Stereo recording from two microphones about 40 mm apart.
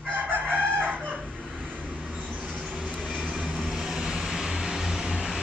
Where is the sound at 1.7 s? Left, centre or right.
Right.